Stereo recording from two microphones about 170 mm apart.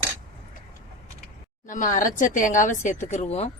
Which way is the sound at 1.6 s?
50° left (ahead or behind).